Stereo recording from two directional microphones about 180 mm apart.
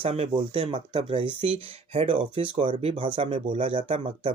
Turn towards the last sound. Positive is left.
turn(degrees=-35)  # may be behind; listen again after turning